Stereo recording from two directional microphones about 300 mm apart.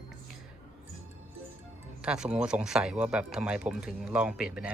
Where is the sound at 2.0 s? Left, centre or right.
Centre.